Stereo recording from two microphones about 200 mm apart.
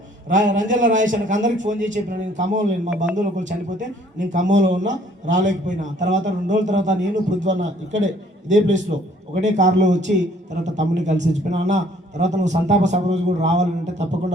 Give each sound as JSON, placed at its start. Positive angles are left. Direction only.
{"t": 0.3, "sound": "a man's voice", "side_deg": -40}
{"t": 8.4, "sound": "a man's voice", "side_deg": -35}
{"t": 9.6, "sound": "speech", "side_deg": -60}
{"t": 10.6, "sound": "a man's voice", "side_deg": -35}